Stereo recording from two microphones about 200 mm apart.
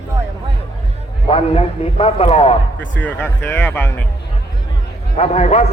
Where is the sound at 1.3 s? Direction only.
30° left (ahead or behind).